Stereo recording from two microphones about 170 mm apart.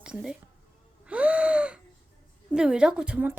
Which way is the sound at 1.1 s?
5° right (ahead or behind).